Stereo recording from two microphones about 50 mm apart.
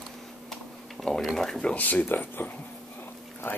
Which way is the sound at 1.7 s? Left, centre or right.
Left.